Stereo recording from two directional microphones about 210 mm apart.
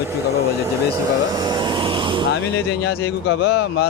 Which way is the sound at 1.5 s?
20° right (ahead or behind).